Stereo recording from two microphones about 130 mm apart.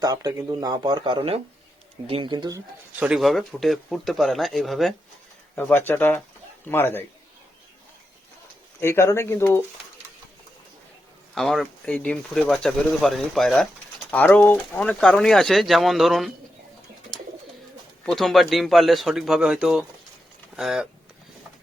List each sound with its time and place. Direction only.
0.0 s speech: 30° right (ahead or behind)
3.0 s speech: 5° right (ahead or behind)
5.5 s speech: 15° left (ahead or behind)
8.8 s speech: 20° left (ahead or behind)
11.3 s speech: centre (ahead or behind)
18.0 s speech: centre (ahead or behind)